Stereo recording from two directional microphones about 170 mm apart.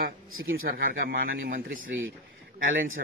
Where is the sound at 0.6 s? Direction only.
60° right (ahead or behind).